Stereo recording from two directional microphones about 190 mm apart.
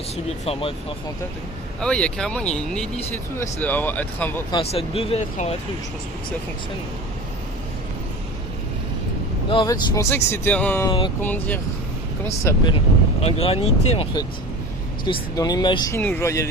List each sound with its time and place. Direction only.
0.3 s speech: 30° left (ahead or behind)
1.8 s speech: 5° left (ahead or behind)
4.5 s speech: 30° left (ahead or behind)
9.5 s speech: 25° left (ahead or behind); by 10.8 s 10° left (ahead or behind)
10.8 s speech: 25° left (ahead or behind)
11.2 s speech: 10° left (ahead or behind)
13.2 s speech: 35° left (ahead or behind)
15.0 s speech: 20° left (ahead or behind)